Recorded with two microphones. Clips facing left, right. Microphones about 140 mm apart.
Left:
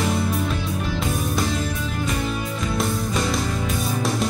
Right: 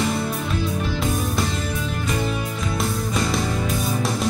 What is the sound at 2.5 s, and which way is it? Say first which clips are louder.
Music: left 1 dB; centre (ahead or behind).